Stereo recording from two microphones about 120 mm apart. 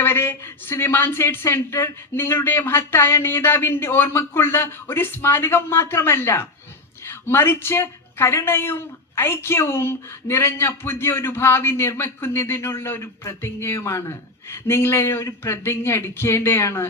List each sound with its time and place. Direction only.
0.0 s a woman's voice: 20° left (ahead or behind)